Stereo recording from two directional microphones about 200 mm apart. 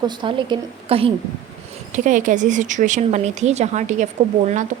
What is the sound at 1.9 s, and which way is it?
Speech, 40° right (ahead or behind).